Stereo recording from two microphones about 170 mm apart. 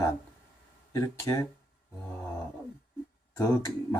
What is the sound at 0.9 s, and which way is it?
Speech, 20° left (ahead or behind).